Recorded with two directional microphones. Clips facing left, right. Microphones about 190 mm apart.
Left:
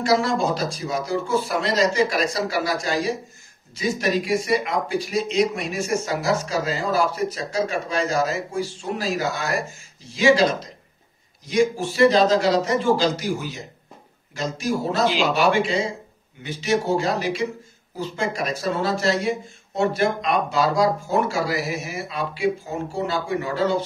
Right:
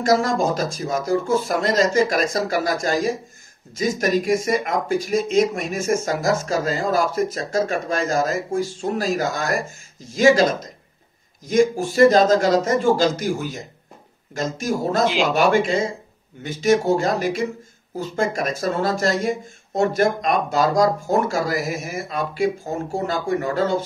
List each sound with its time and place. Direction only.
0.0 s speech: 45° right (ahead or behind)